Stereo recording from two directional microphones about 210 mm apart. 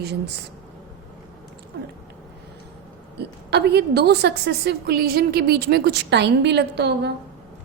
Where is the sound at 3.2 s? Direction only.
50° right (ahead or behind).